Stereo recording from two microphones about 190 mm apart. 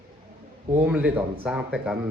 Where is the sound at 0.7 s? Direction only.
10° right (ahead or behind).